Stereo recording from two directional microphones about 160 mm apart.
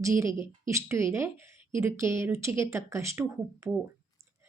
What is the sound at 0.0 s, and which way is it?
A woman's voice, 20° right (ahead or behind).